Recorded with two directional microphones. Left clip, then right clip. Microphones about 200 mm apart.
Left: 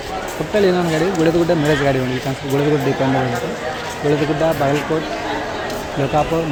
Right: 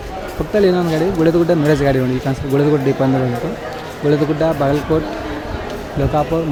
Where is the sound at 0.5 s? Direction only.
20° right (ahead or behind).